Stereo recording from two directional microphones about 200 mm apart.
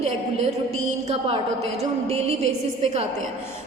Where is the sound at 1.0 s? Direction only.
30° right (ahead or behind).